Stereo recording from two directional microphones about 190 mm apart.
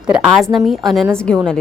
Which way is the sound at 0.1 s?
5° right (ahead or behind).